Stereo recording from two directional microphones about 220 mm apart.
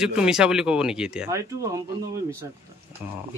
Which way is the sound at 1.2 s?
15° right (ahead or behind).